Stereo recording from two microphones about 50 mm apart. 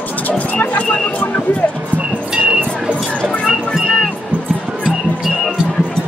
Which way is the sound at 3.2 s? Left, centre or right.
Centre.